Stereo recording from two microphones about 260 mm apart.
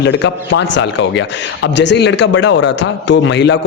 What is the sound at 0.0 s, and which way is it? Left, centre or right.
A man's voice, left.